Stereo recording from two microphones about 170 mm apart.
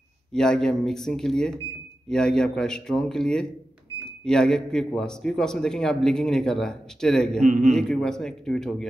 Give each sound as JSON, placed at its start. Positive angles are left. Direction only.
{"t": 0.3, "sound": "a man's voice", "side_deg": 5}
{"t": 7.4, "sound": "a man's voice", "side_deg": -50}
{"t": 7.7, "sound": "a man's voice", "side_deg": 5}